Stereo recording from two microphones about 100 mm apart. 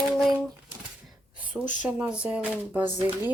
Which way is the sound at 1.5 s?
15° right (ahead or behind).